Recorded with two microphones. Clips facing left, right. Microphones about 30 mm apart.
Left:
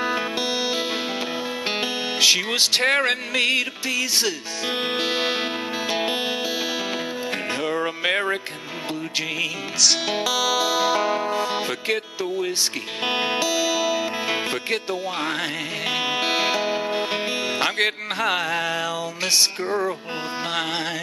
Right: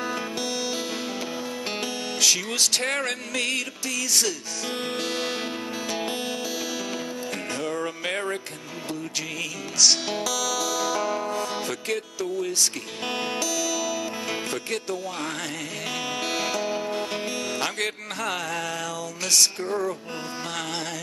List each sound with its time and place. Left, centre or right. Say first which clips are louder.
0.0 s music: left 5 dB; left
7.6 s music: left 6 dB; left
9.8 s music: even; centre
10.1 s music: left 5 dB; left
13.0 s speech: left 5 dB; left
15.9 s music: left 6 dB; left